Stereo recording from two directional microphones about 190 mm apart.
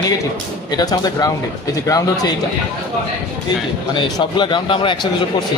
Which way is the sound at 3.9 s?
25° left (ahead or behind).